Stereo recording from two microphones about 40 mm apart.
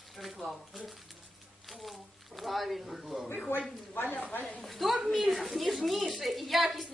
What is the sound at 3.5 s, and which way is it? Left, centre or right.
Speech, left.